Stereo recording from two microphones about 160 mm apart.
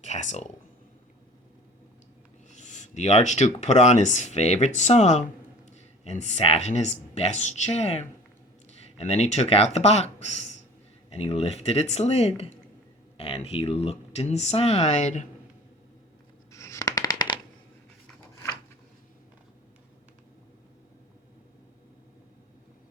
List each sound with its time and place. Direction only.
0.0 s speech: 45° left (ahead or behind)
2.5 s speech: 50° left (ahead or behind)
16.5 s a sound: 20° left (ahead or behind)